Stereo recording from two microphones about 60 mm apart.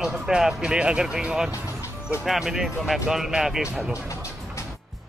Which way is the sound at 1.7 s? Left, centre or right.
Left.